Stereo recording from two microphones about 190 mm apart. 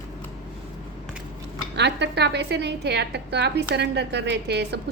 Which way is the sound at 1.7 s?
65° right (ahead or behind).